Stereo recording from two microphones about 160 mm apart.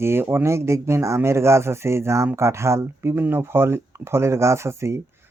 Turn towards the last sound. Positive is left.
turn(degrees=-15)  # may be behind; listen again after turning